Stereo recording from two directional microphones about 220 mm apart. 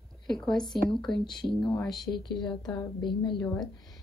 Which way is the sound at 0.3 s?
5° left (ahead or behind).